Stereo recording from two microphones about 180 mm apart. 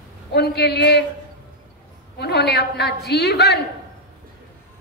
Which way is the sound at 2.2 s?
65° left (ahead or behind).